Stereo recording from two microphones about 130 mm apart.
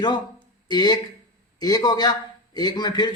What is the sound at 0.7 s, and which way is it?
Speech, 35° left (ahead or behind).